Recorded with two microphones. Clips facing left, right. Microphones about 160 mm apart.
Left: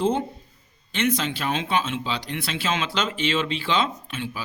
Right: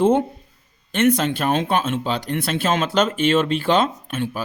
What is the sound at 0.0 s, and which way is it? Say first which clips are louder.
Speech: right 6 dB; 55° right (ahead or behind).